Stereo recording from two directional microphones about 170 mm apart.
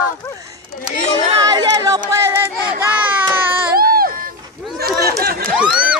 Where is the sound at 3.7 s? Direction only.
60° right (ahead or behind).